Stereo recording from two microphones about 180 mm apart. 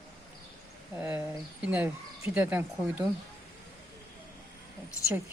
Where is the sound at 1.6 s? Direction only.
5° right (ahead or behind).